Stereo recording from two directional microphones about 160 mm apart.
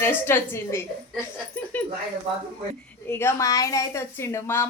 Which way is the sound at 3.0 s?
15° left (ahead or behind).